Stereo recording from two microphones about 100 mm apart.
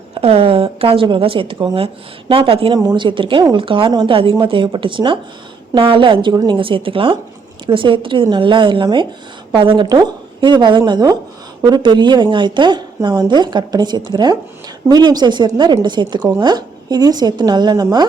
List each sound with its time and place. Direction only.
0.1 s a woman's voice: 70° right (ahead or behind)
2.7 s a woman's voice: 45° right (ahead or behind)
6.3 s a woman's voice: 40° right (ahead or behind)
6.6 s a woman's voice: 60° right (ahead or behind); by 17.8 s 45° right (ahead or behind)